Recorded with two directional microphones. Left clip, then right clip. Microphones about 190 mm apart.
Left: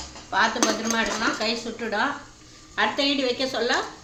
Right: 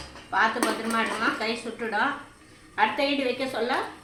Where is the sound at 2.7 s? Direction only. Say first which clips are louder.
Left 1 dB; 30° left (ahead or behind).